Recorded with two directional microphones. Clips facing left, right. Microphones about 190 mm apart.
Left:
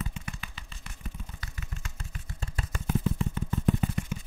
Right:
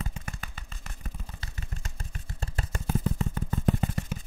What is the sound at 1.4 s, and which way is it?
Vehicle, 35° right (ahead or behind).